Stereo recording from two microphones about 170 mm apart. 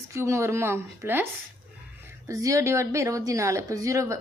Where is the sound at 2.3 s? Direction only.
20° right (ahead or behind).